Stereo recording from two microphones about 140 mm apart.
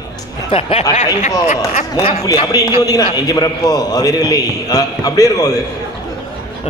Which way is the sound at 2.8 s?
25° left (ahead or behind).